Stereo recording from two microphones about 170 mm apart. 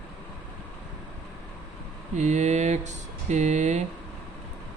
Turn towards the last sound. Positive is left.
turn(degrees=-45)  # may be behind; listen again after turning